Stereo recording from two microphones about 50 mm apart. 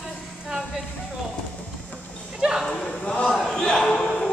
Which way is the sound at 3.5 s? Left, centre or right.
Centre.